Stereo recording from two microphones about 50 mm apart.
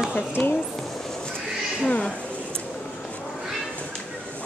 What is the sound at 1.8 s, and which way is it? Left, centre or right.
Speech, left.